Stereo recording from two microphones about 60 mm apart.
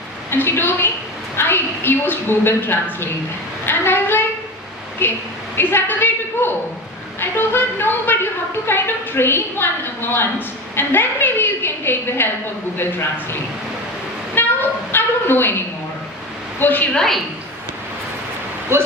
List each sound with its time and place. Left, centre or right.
0.3 s a woman's voice: left
14.3 s a sound: left
16.6 s a woman's voice: left
16.9 s a woman's voice: centre
18.7 s speech: right